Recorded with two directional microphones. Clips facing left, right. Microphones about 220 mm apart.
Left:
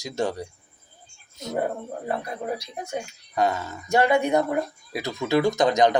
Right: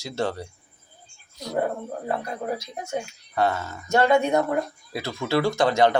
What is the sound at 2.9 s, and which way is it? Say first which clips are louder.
Speech: right 3 dB; 15° left (ahead or behind).